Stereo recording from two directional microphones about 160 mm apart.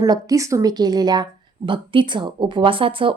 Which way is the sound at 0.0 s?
20° right (ahead or behind).